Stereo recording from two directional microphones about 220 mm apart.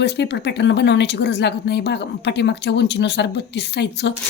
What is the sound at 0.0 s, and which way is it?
A woman's voice, 50° left (ahead or behind).